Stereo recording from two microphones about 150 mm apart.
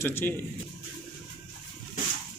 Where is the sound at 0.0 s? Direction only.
15° left (ahead or behind).